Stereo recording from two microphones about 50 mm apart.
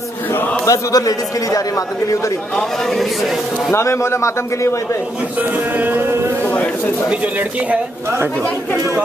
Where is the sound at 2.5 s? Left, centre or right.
Centre.